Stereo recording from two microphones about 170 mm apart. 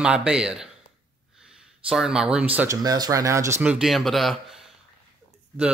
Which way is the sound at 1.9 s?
5° right (ahead or behind).